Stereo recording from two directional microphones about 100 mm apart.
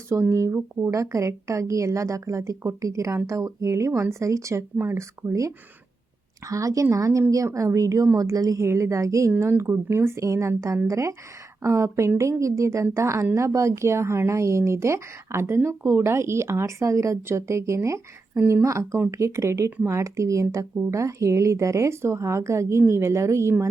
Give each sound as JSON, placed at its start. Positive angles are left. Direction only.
{"t": 0.1, "sound": "a woman's voice", "side_deg": -25}